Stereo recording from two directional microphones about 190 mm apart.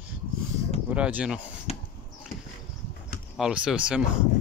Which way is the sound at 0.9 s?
5° right (ahead or behind).